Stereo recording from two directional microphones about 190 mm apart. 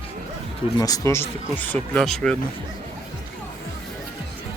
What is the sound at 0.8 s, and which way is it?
Speech, 20° left (ahead or behind).